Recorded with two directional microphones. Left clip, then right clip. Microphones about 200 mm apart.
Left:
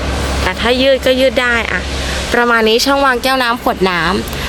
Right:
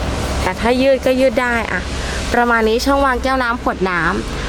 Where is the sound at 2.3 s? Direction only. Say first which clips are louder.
Left 3 dB; 15° left (ahead or behind).